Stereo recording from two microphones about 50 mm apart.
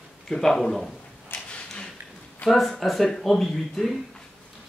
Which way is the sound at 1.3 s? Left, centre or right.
Left.